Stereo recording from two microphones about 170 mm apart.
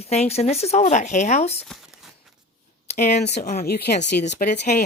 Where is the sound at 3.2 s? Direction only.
70° left (ahead or behind).